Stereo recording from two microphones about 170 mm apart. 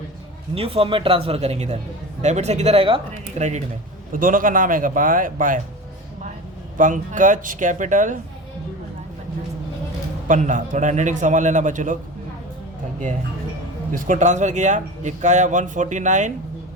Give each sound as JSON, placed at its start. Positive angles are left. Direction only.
{"t": 0.5, "sound": "speech", "side_deg": -35}
{"t": 4.1, "sound": "speech", "side_deg": -55}
{"t": 6.7, "sound": "speech", "side_deg": -50}
{"t": 10.2, "sound": "speech", "side_deg": -50}
{"t": 13.9, "sound": "speech", "side_deg": -50}